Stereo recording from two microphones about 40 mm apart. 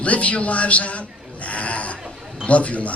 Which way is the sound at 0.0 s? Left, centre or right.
Left.